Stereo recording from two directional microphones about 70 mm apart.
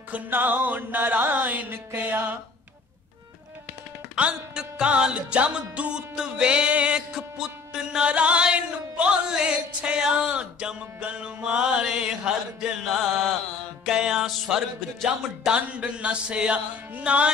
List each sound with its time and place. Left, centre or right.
0.1 s music: right
4.1 s music: centre
15.5 s music: centre